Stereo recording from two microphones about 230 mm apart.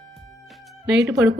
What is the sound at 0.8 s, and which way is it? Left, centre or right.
Speech, right.